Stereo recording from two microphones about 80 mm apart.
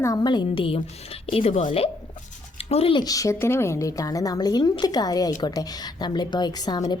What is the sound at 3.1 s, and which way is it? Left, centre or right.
Speech, left.